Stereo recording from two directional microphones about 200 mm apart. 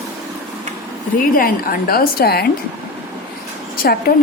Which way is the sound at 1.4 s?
45° left (ahead or behind).